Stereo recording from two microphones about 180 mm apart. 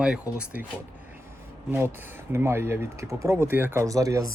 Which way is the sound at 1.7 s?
10° right (ahead or behind).